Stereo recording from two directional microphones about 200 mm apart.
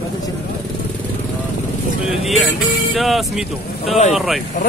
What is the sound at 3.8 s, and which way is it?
Speech, 30° left (ahead or behind).